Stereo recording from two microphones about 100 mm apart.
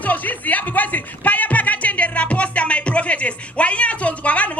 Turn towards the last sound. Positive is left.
turn(degrees=15)  # may be behind; listen again after turning